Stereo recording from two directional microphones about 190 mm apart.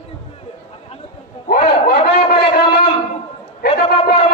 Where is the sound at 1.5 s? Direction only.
55° left (ahead or behind).